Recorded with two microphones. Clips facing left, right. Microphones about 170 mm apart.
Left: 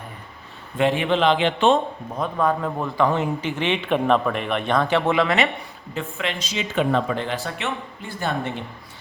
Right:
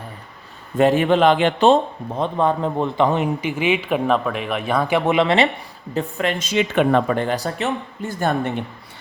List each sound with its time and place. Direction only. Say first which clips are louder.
0.8 s a man's voice: right 5 dB; 40° right (ahead or behind); by 5.5 s 25° right (ahead or behind)
5.9 s speech: right 6 dB; 40° right (ahead or behind)